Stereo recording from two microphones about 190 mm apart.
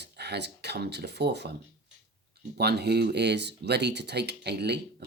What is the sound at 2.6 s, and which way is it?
Speech, 60° right (ahead or behind).